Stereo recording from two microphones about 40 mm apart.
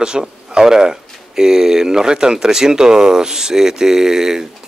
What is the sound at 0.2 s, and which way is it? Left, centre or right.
Speech, centre.